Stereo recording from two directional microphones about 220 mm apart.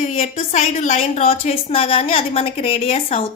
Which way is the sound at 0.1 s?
30° left (ahead or behind).